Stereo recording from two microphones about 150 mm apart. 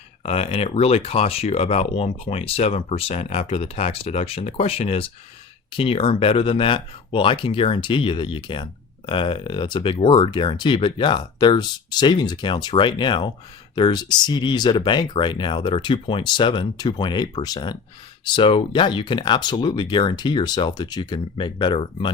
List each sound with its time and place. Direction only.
0.2 s speech: 40° left (ahead or behind)